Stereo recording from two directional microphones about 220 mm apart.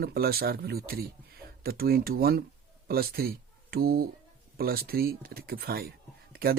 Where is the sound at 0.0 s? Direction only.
45° right (ahead or behind).